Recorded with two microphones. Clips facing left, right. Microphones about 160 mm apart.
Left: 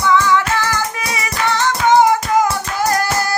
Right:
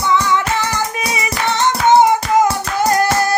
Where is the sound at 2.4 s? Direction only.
25° right (ahead or behind).